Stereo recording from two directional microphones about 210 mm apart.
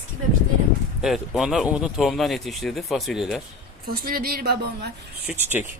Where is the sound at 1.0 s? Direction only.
Centre (ahead or behind).